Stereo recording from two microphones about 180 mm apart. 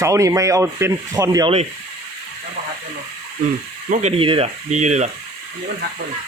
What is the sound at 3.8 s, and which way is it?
Speech, 45° right (ahead or behind).